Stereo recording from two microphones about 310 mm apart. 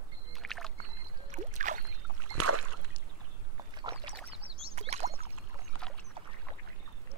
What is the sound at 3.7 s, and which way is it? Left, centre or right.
Rowboat, centre.